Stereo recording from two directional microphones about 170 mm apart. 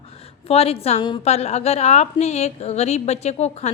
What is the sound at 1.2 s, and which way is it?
A woman's voice, 40° left (ahead or behind).